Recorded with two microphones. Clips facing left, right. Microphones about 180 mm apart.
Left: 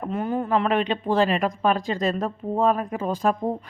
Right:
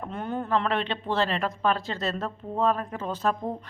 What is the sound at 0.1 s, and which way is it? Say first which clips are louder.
Speech: left 4 dB; 5° left (ahead or behind).